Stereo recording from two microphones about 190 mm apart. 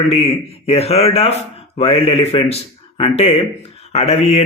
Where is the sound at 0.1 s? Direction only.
30° left (ahead or behind).